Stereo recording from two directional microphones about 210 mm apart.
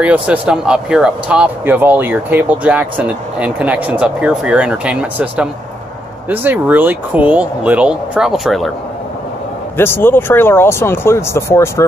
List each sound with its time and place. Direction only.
0.0 s speech: 5° right (ahead or behind)
9.8 s speech: 10° left (ahead or behind)